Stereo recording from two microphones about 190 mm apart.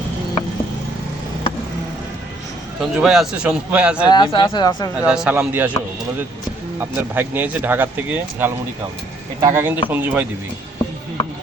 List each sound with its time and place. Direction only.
2.8 s a man's voice: centre (ahead or behind)
4.1 s speech: 25° left (ahead or behind)
5.0 s speech: 5° right (ahead or behind)
6.7 s speech: 10° right (ahead or behind)